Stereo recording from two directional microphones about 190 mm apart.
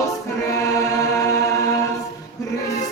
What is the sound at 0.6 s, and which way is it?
Chant, 15° left (ahead or behind).